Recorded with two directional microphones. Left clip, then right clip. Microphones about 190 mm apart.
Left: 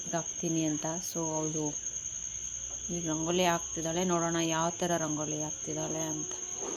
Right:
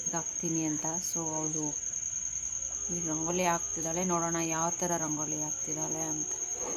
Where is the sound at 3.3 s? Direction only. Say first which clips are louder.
Left 2 dB; 15° left (ahead or behind).